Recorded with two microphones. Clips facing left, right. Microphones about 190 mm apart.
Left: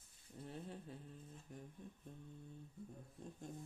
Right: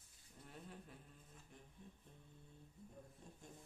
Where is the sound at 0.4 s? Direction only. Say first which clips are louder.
Left 6 dB; 30° left (ahead or behind).